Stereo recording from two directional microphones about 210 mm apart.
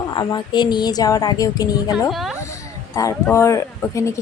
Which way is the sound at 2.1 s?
Centre (ahead or behind).